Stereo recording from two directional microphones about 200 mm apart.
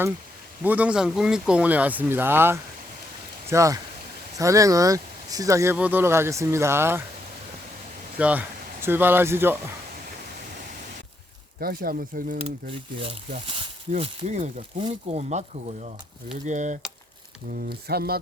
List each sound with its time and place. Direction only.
0.6 s speech: 10° right (ahead or behind)
8.2 s speech: 10° right (ahead or behind)
11.6 s speech: 50° right (ahead or behind)
12.4 s speech: 25° right (ahead or behind)
17.5 s speech: 50° right (ahead or behind)